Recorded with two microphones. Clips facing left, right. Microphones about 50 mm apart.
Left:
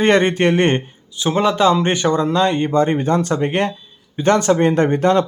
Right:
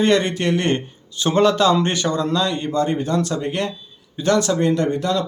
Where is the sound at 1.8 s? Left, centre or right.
Left.